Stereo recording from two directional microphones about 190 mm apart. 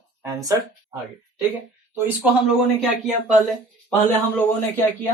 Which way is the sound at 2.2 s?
Centre (ahead or behind).